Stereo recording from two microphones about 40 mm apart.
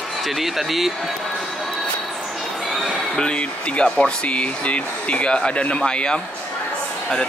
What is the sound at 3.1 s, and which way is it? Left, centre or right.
Speech, left.